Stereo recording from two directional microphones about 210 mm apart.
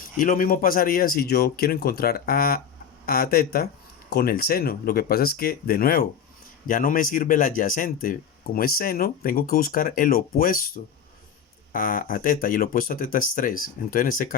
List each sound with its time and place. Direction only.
0.0 s speech: 40° left (ahead or behind)
11.7 s speech: 40° left (ahead or behind)